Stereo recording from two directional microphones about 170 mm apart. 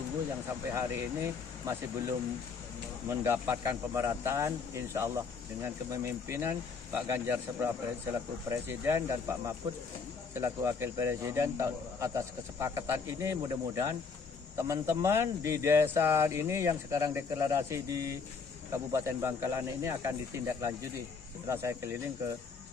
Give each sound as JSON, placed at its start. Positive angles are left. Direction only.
{"t": 0.7, "sound": "speech", "side_deg": -15}